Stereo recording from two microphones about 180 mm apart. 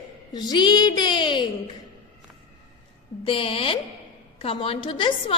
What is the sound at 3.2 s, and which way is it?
A woman's voice, 30° left (ahead or behind).